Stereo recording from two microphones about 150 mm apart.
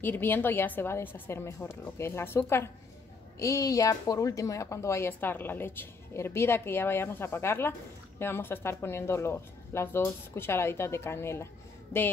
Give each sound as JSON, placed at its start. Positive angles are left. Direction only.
{"t": 0.0, "sound": "a woman's voice", "side_deg": 15}